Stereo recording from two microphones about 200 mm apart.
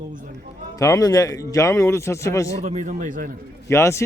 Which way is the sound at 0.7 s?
15° left (ahead or behind).